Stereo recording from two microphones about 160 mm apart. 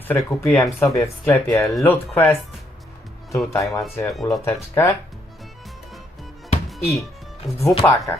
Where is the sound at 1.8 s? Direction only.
15° left (ahead or behind).